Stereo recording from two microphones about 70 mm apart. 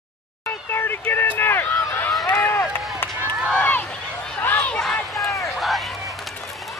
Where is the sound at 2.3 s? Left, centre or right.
Left.